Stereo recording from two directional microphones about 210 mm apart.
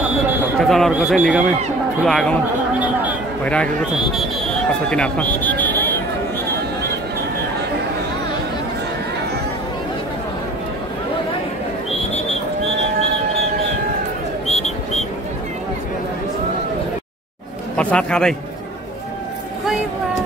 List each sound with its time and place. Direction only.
0.6 s a man's voice: centre (ahead or behind)
3.4 s a man's voice: 5° left (ahead or behind)
14.5 s a sound: 30° left (ahead or behind)
17.7 s a man's voice: 5° left (ahead or behind)